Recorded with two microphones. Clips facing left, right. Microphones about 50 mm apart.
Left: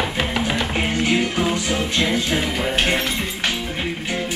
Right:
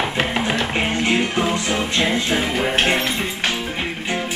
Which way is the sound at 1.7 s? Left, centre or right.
Right.